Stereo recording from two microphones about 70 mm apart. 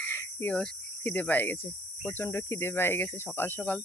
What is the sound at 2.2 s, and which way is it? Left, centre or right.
Speech, left.